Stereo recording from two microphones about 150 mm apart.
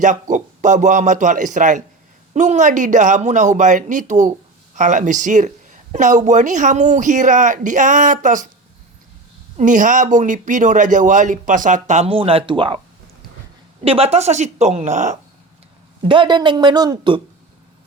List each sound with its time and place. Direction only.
0.0 s speech: 55° right (ahead or behind)
9.6 s speech: 60° right (ahead or behind); by 12.8 s 35° right (ahead or behind)
13.8 s a woman's voice: 40° right (ahead or behind)
16.0 s a woman's voice: 35° right (ahead or behind)